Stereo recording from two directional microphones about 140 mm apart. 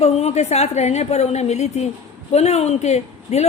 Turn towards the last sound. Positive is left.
turn(degrees=50)  # may be behind; listen again after turning